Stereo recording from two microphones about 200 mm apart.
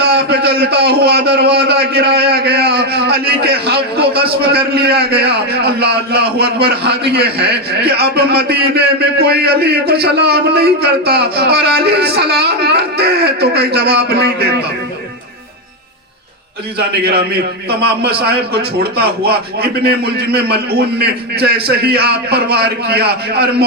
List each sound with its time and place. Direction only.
0.0 s a man's voice: 55° right (ahead or behind)
16.7 s a man's voice: 55° right (ahead or behind)